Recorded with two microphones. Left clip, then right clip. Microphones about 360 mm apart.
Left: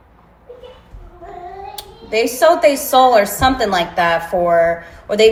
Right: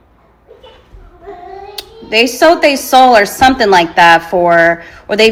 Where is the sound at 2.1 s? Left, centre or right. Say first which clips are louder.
Right 4 dB; right.